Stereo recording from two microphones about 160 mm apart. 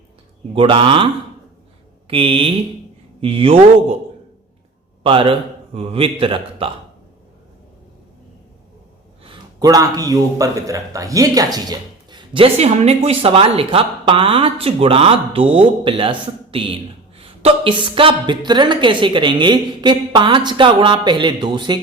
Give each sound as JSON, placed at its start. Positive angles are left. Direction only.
{"t": 0.5, "sound": "a man's voice", "side_deg": -35}
{"t": 5.0, "sound": "a man's voice", "side_deg": -35}
{"t": 9.2, "sound": "a man's voice", "side_deg": -30}